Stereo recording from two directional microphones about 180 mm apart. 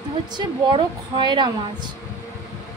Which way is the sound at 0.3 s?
25° right (ahead or behind).